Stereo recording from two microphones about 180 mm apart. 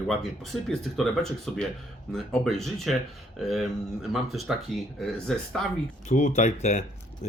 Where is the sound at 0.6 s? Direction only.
Centre (ahead or behind).